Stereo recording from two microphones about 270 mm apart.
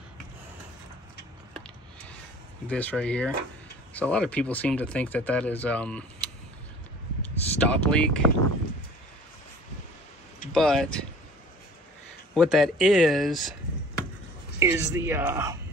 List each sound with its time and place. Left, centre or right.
2.7 s speech: centre
7.2 s a sound: centre
10.5 s speech: centre
12.4 s speech: centre
14.6 s speech: centre